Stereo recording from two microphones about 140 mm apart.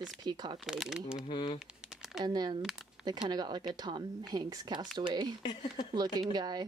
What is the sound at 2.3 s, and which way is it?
Speech, 30° right (ahead or behind).